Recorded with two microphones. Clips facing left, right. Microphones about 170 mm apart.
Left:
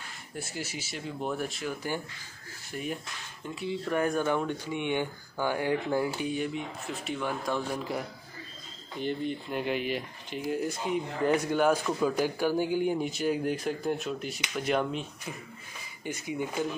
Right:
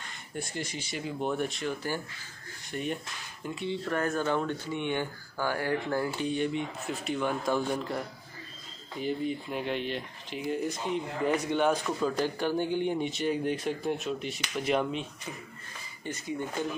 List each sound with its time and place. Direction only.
0.0 s speech: 5° left (ahead or behind)
16.1 s speech: 10° left (ahead or behind)